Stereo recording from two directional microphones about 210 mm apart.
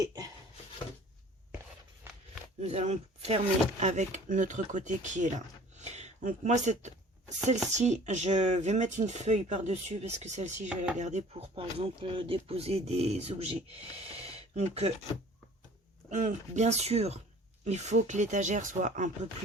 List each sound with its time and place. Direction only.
2.6 s speech: 30° right (ahead or behind)
5.7 s a sound: 30° right (ahead or behind)
7.8 s speech: 35° right (ahead or behind)
16.0 s speech: 35° right (ahead or behind)